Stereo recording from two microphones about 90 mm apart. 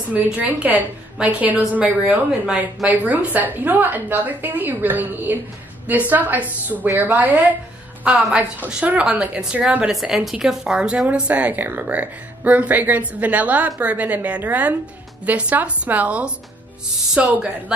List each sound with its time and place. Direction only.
0.1 s a woman's voice: 15° right (ahead or behind)
9.9 s a woman's voice: centre (ahead or behind)